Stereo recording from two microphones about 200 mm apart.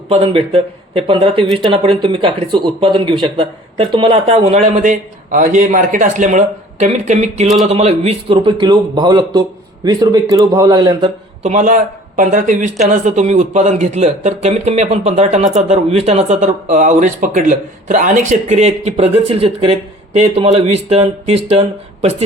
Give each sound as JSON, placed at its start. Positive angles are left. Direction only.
{"t": 0.1, "sound": "speech", "side_deg": -30}
{"t": 7.4, "sound": "a sound", "side_deg": 0}
{"t": 7.7, "sound": "speech", "side_deg": -30}
{"t": 11.4, "sound": "speech", "side_deg": -40}